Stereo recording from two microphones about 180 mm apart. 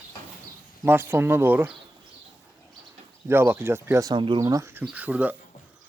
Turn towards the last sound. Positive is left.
turn(degrees=-10)  # may be behind; listen again after turning